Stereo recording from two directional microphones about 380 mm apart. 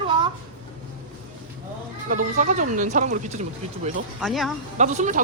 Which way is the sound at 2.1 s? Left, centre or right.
Centre.